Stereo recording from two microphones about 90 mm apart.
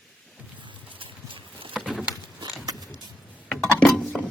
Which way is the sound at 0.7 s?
75° right (ahead or behind).